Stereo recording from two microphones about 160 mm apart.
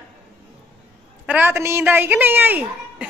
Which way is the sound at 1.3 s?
10° right (ahead or behind).